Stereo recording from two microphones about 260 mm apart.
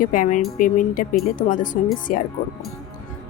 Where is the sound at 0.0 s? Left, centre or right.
Left.